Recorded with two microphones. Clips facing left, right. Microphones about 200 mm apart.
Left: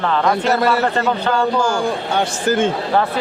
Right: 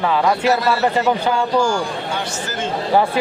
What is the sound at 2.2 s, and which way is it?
Speech, 55° left (ahead or behind).